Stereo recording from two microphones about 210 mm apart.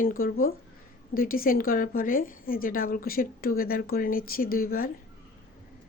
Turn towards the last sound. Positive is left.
turn(degrees=45)  # may be behind; listen again after turning